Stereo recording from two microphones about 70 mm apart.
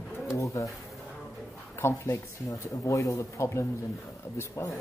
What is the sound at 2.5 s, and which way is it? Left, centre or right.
Speech, left.